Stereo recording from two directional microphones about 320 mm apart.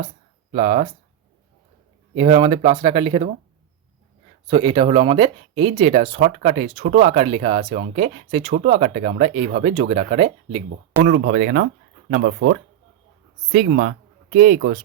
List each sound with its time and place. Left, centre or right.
0.5 s speech: right
2.1 s speech: centre
4.4 s speech: centre
13.5 s speech: right